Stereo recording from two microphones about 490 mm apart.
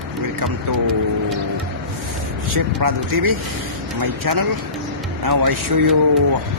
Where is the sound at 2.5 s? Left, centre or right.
Right.